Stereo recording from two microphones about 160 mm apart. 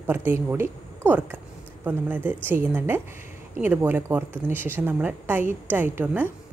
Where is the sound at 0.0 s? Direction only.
15° right (ahead or behind).